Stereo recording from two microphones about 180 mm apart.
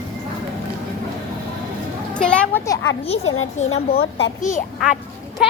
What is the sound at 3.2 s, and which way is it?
A woman's voice, 85° left.